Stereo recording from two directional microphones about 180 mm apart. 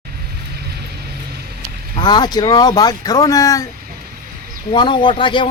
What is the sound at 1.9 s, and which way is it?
Speech, 25° left (ahead or behind).